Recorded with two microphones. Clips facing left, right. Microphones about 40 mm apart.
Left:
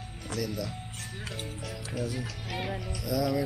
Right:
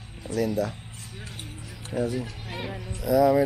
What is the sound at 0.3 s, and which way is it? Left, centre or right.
Speech, left.